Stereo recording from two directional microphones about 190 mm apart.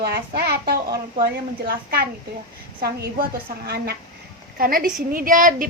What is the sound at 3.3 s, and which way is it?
A woman's voice, 55° right (ahead or behind).